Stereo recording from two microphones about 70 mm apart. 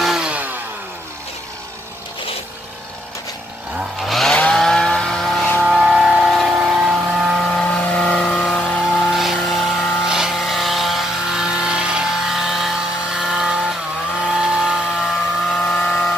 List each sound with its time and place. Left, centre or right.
0.0 s chainsaw: centre
0.3 s chainsaw: right
4.0 s chainsaw: centre
4.5 s vehicle: centre
7.5 s vehicle: centre
15.0 s vehicle: centre